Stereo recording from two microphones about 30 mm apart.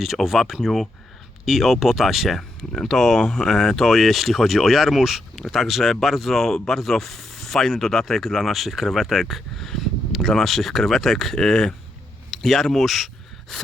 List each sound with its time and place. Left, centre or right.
0.3 s speech: centre
2.8 s speech: centre
9.3 s a sound: centre
10.2 s speech: centre
11.3 s speech: left
12.3 s speech: centre